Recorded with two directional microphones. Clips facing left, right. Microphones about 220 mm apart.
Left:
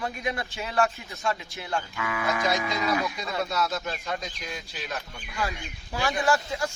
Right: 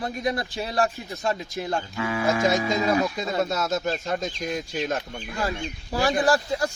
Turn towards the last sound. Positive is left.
turn(degrees=-35)  # may be behind; listen again after turning